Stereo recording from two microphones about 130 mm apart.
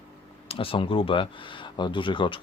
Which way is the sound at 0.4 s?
45° left (ahead or behind).